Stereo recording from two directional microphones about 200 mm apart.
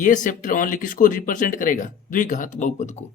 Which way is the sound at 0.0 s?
40° left (ahead or behind).